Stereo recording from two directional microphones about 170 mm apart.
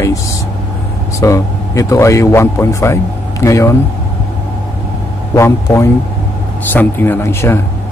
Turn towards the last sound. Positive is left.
turn(degrees=15)  # may be behind; listen again after turning